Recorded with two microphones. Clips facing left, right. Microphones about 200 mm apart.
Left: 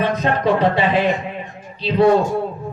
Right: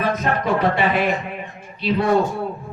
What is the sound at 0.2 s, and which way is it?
Speech, 30° left (ahead or behind).